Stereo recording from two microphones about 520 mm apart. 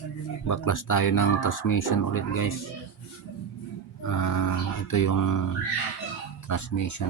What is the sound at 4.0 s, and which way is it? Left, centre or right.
Speech, left.